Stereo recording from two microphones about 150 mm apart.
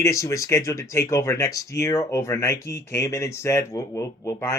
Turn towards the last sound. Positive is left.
turn(degrees=20)  # may be behind; listen again after turning